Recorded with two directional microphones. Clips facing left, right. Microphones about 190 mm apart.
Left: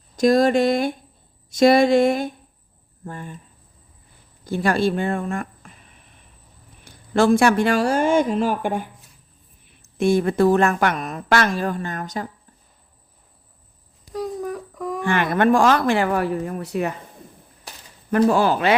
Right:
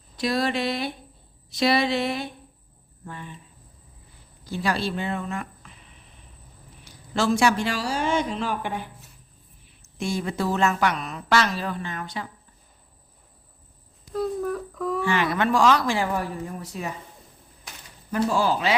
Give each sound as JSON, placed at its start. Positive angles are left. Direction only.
{"t": 0.2, "sound": "a woman's voice", "side_deg": 45}
{"t": 4.4, "sound": "a woman's voice", "side_deg": 50}
{"t": 14.1, "sound": "a sound", "side_deg": 15}
{"t": 15.0, "sound": "speech", "side_deg": 55}
{"t": 18.1, "sound": "speech", "side_deg": 60}